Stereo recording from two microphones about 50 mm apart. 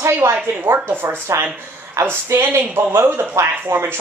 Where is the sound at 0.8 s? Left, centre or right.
Right.